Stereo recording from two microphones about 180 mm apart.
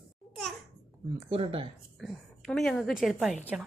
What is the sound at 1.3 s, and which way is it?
Speech, 30° right (ahead or behind).